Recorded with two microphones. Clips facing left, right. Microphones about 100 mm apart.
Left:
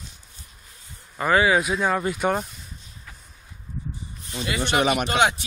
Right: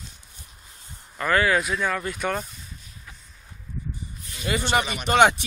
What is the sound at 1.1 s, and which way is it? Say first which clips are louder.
Speech: left 2 dB; 15° left (ahead or behind).